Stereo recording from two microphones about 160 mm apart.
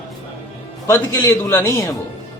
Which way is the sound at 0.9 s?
20° left (ahead or behind).